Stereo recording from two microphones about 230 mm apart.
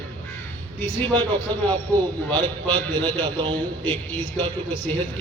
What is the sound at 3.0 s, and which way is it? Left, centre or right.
Speech, centre.